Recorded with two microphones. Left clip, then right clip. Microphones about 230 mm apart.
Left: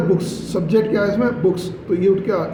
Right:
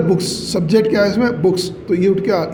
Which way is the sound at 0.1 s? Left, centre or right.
Right.